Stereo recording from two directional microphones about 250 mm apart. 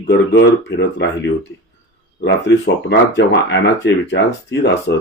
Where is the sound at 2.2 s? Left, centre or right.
Left.